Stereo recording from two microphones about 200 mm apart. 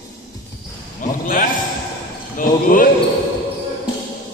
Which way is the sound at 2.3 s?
45° left (ahead or behind).